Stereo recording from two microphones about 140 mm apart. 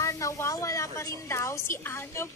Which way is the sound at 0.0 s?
20° left (ahead or behind).